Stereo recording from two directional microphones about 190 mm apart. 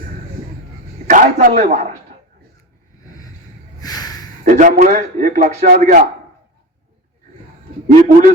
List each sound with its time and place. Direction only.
1.0 s a man's voice: 45° right (ahead or behind)
3.8 s a sound: 20° left (ahead or behind)
4.4 s a man's voice: 40° right (ahead or behind)
7.9 s a man's voice: 35° right (ahead or behind)